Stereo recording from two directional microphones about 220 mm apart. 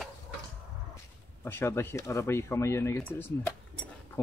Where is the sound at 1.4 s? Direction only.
10° left (ahead or behind).